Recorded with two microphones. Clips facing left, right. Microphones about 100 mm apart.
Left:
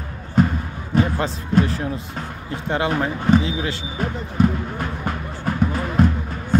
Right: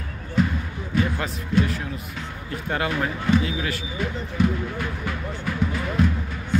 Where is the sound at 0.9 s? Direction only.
40° left (ahead or behind).